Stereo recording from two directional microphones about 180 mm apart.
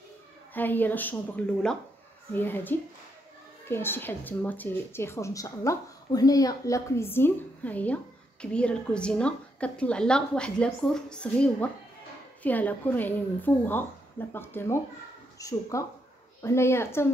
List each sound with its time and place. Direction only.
0.6 s speech: 10° left (ahead or behind)